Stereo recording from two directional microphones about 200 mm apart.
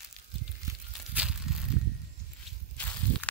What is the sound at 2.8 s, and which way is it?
Snake, 10° left (ahead or behind).